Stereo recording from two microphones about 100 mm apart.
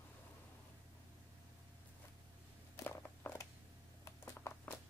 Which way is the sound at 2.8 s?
25° left (ahead or behind).